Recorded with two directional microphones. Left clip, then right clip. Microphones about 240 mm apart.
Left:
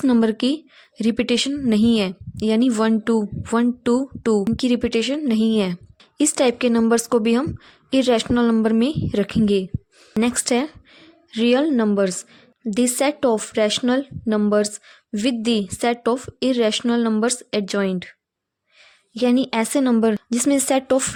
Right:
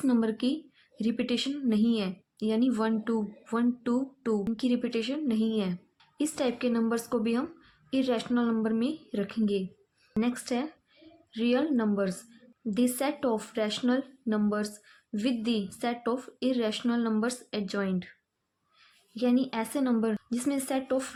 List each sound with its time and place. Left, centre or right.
0.0 s speech: left
19.1 s speech: left